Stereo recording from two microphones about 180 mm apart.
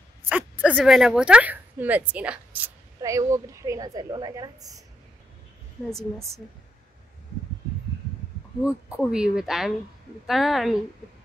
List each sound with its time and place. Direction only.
0.2 s a sound: 10° right (ahead or behind)
0.7 s a woman's voice: 5° right (ahead or behind)
5.9 s speech: centre (ahead or behind)
8.6 s speech: 5° right (ahead or behind)